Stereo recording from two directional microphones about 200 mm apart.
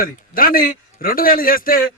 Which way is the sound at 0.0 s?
45° left (ahead or behind).